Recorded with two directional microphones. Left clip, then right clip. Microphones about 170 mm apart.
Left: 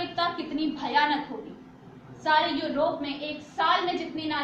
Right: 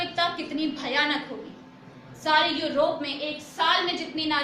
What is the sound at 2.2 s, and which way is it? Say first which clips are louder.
Speech: right 1 dB; 20° right (ahead or behind).